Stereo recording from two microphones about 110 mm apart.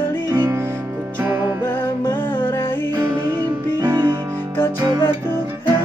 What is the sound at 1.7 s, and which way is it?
Music, 20° left (ahead or behind).